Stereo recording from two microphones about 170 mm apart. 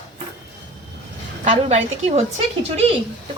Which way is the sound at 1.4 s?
40° right (ahead or behind).